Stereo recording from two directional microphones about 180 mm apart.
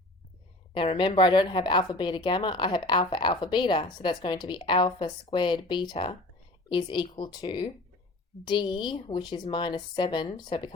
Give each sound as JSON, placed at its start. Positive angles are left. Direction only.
{"t": 0.7, "sound": "a woman's voice", "side_deg": 30}